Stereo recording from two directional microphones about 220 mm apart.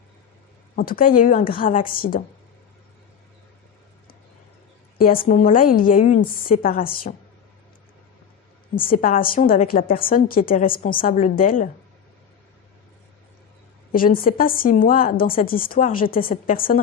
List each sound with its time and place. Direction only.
0.8 s a woman's voice: 40° left (ahead or behind)
4.9 s a woman's voice: 40° left (ahead or behind)
8.7 s a woman's voice: 40° left (ahead or behind)
13.9 s a woman's voice: 40° left (ahead or behind)